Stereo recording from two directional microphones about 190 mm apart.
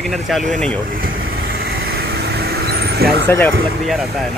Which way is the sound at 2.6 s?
55° right (ahead or behind).